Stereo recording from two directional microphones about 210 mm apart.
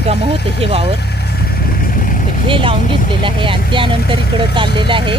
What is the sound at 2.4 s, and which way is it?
Speech, 25° right (ahead or behind).